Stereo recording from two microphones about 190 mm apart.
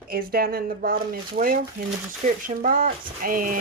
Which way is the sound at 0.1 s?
55° right (ahead or behind).